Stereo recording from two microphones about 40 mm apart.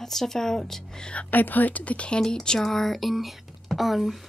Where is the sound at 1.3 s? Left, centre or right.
Left.